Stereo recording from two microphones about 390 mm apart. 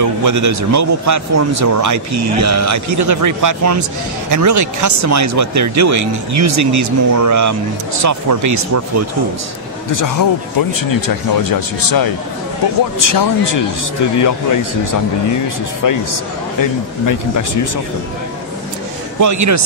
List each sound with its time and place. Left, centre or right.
0.0 s speech: right
9.9 s a man's voice: left
19.1 s speech: right